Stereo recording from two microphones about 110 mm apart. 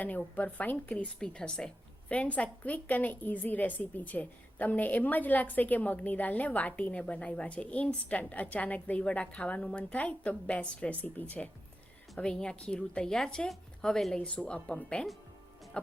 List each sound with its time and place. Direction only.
0.3 s a woman's voice: 15° left (ahead or behind)